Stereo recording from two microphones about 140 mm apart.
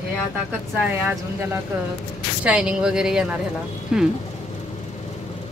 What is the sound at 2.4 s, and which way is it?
Speech, 10° right (ahead or behind).